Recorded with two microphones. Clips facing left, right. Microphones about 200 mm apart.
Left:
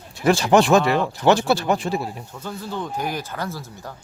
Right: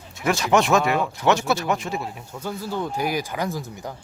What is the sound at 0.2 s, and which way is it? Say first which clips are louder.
Speech: left 4 dB; 30° left (ahead or behind).